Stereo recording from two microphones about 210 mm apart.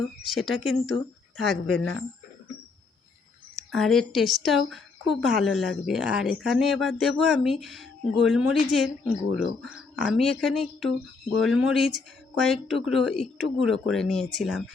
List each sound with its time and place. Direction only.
0.0 s a woman's voice: centre (ahead or behind)
1.6 s speech: 90° left
3.5 s a woman's voice: centre (ahead or behind)